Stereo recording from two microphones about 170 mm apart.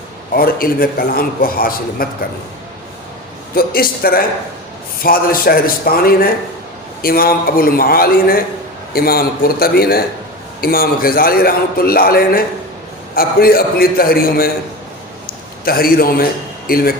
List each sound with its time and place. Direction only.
0.3 s a man's voice: 60° left (ahead or behind)
3.5 s a man's voice: 60° left (ahead or behind)
15.6 s a man's voice: 60° left (ahead or behind)